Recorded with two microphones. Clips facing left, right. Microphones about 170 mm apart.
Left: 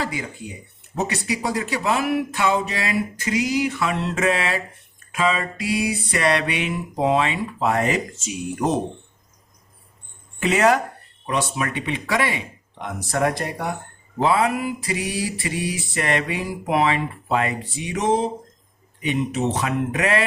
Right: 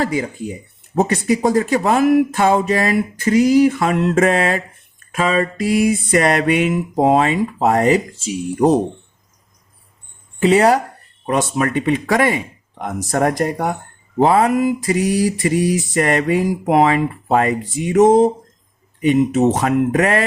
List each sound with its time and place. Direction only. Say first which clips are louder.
0.0 s mantra: right 8 dB; 45° right (ahead or behind)
10.4 s speech: right 5 dB; 35° right (ahead or behind)
11.3 s mantra: right 6 dB; 45° right (ahead or behind)
19.3 s mantra: right 8 dB; 45° right (ahead or behind)